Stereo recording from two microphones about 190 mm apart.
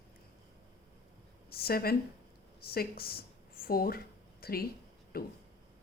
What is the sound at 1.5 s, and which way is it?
A woman's voice, 55° left (ahead or behind).